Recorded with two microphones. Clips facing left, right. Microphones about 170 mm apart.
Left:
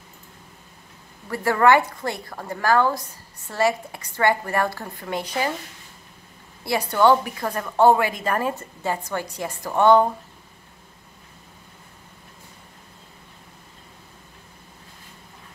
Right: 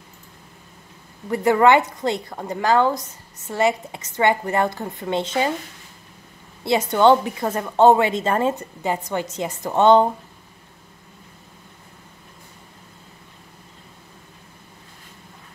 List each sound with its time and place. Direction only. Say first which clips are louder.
1.3 s a woman's voice: right 2 dB; 20° right (ahead or behind)
6.6 s a woman's voice: right 3 dB; 20° right (ahead or behind)